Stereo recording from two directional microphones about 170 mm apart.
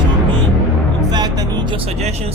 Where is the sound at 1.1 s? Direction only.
25° right (ahead or behind); by 2.3 s 40° right (ahead or behind).